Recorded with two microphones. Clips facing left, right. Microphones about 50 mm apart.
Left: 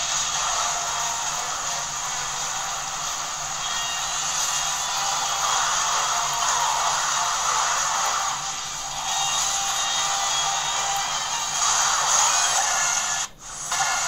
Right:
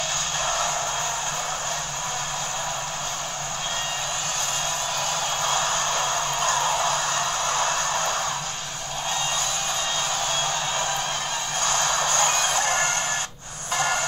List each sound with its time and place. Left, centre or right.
5.4 s music: centre
11.6 s music: centre